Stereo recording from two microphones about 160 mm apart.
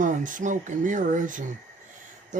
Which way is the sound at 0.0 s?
55° right (ahead or behind).